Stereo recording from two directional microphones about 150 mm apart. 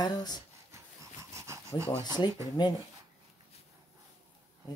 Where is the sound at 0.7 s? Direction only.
20° right (ahead or behind).